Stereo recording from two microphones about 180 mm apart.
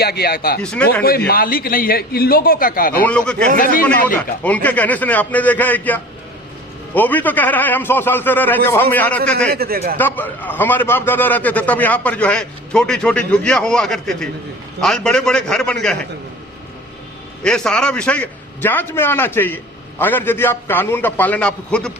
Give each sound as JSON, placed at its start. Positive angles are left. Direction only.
{"t": 0.0, "sound": "speech", "side_deg": 60}
{"t": 0.6, "sound": "a man's voice", "side_deg": 5}
{"t": 1.3, "sound": "a man's voice", "side_deg": 55}
{"t": 3.0, "sound": "a man's voice", "side_deg": 5}
{"t": 9.5, "sound": "speech", "side_deg": -60}
{"t": 10.0, "sound": "a man's voice", "side_deg": 10}
{"t": 17.4, "sound": "a man's voice", "side_deg": 5}